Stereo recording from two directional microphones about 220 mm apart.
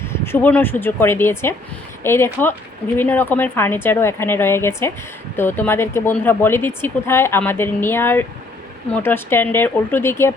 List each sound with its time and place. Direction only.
0.0 s speech: 10° left (ahead or behind)